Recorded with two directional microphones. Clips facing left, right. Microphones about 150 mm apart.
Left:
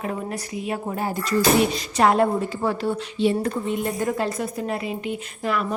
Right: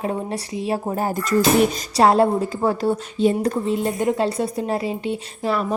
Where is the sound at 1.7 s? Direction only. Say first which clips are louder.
Right 3 dB; 30° right (ahead or behind).